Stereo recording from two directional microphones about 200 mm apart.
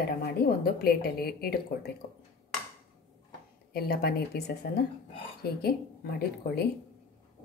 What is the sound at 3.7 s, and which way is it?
A woman's voice, 50° left (ahead or behind).